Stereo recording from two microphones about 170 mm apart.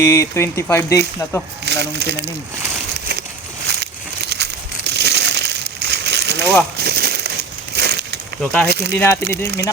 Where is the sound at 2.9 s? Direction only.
75° right (ahead or behind).